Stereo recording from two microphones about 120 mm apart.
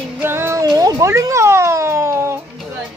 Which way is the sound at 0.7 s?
30° right (ahead or behind).